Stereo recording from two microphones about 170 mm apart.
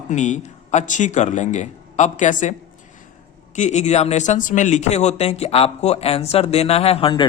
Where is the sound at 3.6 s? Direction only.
40° left (ahead or behind).